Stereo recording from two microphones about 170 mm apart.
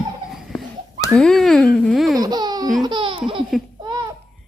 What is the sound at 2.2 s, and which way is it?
Speech, 25° right (ahead or behind).